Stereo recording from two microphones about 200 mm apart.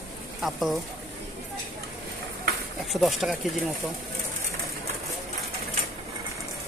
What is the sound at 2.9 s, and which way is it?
Speech, centre (ahead or behind).